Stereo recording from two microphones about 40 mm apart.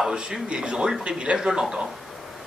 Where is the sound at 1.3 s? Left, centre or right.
Centre.